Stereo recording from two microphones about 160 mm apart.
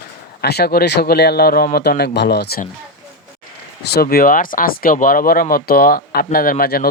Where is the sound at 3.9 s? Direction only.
70° left (ahead or behind).